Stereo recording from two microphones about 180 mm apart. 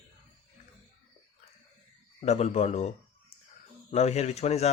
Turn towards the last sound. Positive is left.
turn(degrees=35)  # may be behind; listen again after turning